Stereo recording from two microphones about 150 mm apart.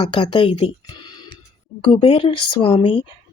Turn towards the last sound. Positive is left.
turn(degrees=35)  # may be behind; listen again after turning